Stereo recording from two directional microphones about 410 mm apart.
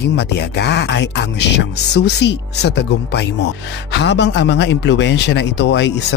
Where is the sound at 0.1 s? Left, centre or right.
Left.